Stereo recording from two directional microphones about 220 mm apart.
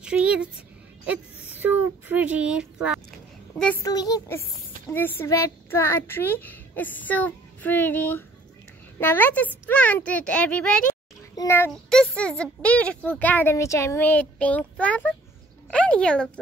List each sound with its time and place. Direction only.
0.0 s speech: 5° right (ahead or behind)
3.8 s a woman's voice: 15° left (ahead or behind)